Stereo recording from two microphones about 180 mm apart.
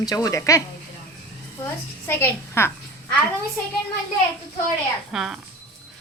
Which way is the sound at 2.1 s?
15° left (ahead or behind).